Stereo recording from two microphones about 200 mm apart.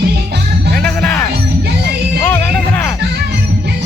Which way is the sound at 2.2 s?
10° left (ahead or behind).